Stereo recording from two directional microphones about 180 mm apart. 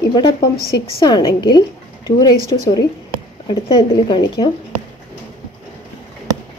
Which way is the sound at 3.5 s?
30° left (ahead or behind).